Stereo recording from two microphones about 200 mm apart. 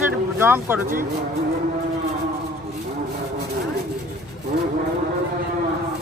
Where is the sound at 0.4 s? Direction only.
10° right (ahead or behind).